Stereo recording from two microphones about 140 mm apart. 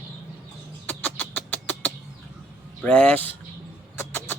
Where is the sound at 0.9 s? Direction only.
10° left (ahead or behind).